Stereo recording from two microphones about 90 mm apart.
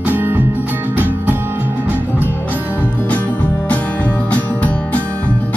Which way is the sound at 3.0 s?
15° left (ahead or behind).